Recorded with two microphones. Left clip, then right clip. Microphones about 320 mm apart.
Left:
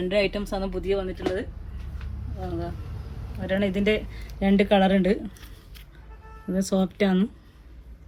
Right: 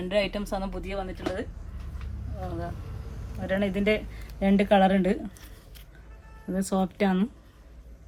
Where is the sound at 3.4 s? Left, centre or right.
Right.